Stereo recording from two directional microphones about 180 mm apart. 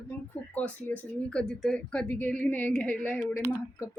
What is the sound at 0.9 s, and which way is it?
Speech, 10° left (ahead or behind).